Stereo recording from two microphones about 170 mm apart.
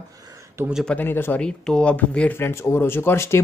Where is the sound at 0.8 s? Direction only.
10° left (ahead or behind).